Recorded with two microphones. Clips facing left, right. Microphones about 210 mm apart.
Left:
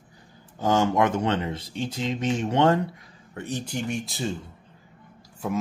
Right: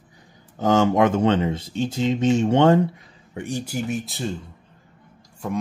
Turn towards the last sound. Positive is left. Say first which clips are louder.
# right 1 dB
turn(degrees=5)  # may be behind; listen again after turning